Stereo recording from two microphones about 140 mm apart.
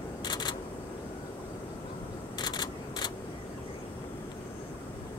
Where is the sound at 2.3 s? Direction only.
30° left (ahead or behind).